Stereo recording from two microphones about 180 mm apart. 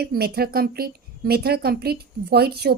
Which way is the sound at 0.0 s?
60° right (ahead or behind).